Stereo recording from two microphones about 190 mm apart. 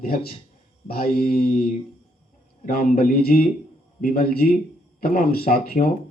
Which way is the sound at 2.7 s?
50° left (ahead or behind).